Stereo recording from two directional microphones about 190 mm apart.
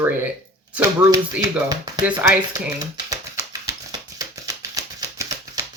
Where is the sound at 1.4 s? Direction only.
20° right (ahead or behind).